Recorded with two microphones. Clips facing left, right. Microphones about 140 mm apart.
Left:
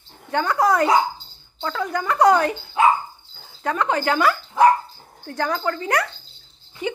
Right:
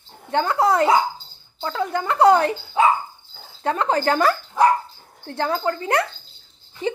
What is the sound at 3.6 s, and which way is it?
Speech, 30° right (ahead or behind).